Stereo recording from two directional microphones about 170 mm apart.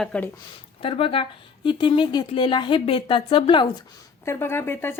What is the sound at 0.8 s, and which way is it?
Speech, 35° left (ahead or behind).